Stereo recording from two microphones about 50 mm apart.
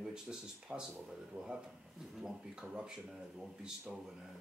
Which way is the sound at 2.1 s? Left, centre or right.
Centre.